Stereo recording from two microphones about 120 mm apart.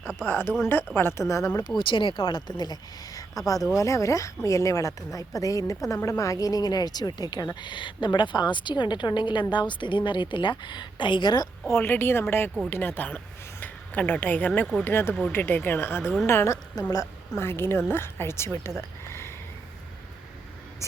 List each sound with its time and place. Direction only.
0.0 s speech: 5° right (ahead or behind)
0.3 s speech: 20° left (ahead or behind)
1.6 s speech: 40° left (ahead or behind)
3.2 s a sound: 30° left (ahead or behind)
3.8 s speech: 25° left (ahead or behind)
11.7 s speech: 20° left (ahead or behind)
19.0 s a sound: 20° left (ahead or behind)